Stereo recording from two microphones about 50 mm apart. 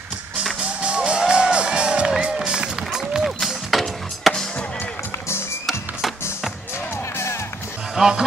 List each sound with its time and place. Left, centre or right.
0.8 s music: right
3.3 s music: centre
5.7 s music: centre
7.9 s music: centre